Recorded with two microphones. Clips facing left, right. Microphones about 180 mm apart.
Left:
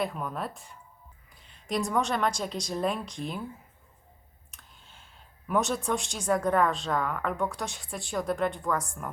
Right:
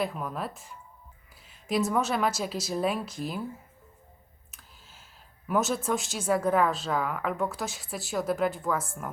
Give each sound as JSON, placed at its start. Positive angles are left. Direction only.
{"t": 0.0, "sound": "a woman's voice", "side_deg": 0}
{"t": 4.5, "sound": "clicking", "side_deg": -5}
{"t": 5.5, "sound": "a woman's voice", "side_deg": 0}